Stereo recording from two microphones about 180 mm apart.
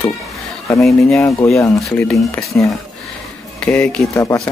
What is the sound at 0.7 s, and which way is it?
Speech, centre (ahead or behind).